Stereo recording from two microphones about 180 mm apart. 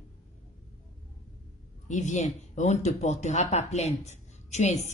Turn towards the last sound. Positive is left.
turn(degrees=40)  # may be behind; listen again after turning